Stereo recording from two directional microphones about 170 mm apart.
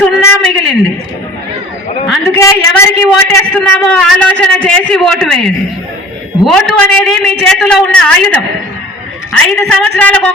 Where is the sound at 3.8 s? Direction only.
5° left (ahead or behind).